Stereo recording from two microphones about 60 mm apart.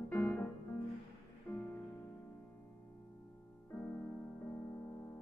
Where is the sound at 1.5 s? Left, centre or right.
Left.